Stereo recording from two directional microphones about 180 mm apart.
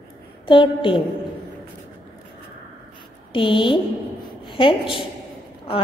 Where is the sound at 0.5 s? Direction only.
30° left (ahead or behind).